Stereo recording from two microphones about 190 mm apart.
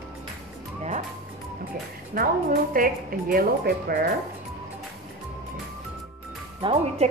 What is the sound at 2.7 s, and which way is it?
A woman's voice, 50° right (ahead or behind).